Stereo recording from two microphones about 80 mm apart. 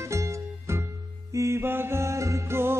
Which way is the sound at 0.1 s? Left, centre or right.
Right.